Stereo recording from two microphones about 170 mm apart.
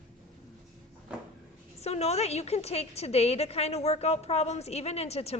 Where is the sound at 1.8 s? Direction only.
40° left (ahead or behind).